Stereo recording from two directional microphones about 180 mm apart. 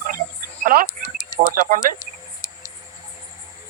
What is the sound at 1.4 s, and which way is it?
Speech, 50° right (ahead or behind).